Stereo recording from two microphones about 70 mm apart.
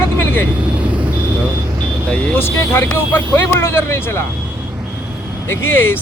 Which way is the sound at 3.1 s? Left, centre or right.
Left.